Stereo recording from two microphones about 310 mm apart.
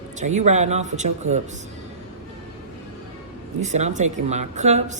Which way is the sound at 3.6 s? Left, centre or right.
Right.